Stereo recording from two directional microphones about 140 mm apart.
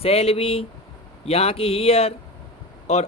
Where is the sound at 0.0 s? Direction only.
45° left (ahead or behind).